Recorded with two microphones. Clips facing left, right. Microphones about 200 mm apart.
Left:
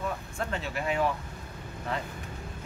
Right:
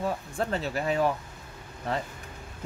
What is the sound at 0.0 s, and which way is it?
Speech, 35° right (ahead or behind).